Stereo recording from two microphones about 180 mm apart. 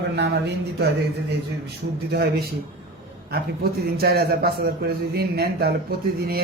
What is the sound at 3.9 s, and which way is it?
A man's voice, 60° right (ahead or behind).